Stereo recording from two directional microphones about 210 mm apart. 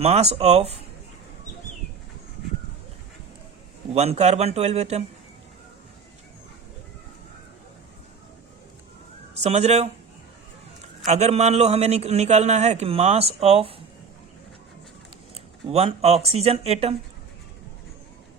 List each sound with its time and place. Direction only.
0.0 s speech: 30° right (ahead or behind)
3.9 s a man's voice: 30° right (ahead or behind)
9.3 s speech: 30° right (ahead or behind)
11.1 s a man's voice: 30° right (ahead or behind)
15.6 s speech: 30° right (ahead or behind)